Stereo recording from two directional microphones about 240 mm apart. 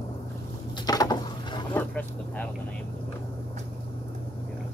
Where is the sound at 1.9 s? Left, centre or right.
Centre.